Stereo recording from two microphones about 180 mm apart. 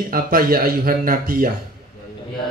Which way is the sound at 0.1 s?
55° right (ahead or behind).